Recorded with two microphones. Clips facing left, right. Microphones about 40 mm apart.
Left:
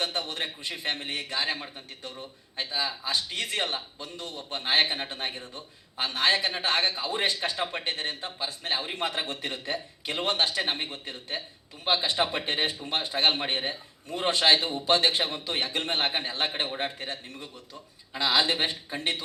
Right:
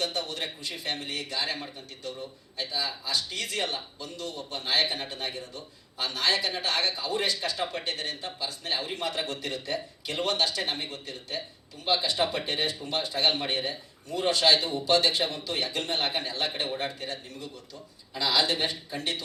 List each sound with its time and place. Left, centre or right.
0.0 s a man's voice: left